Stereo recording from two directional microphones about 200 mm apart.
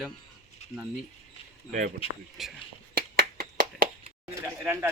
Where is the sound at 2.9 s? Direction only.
45° right (ahead or behind).